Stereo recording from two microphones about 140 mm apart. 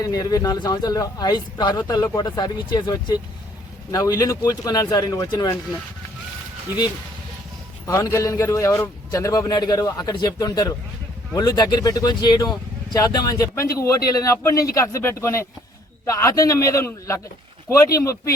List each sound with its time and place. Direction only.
0.0 s a man's voice: 25° left (ahead or behind)
7.9 s a man's voice: 25° left (ahead or behind)